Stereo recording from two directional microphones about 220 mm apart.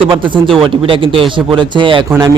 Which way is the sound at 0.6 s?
25° right (ahead or behind).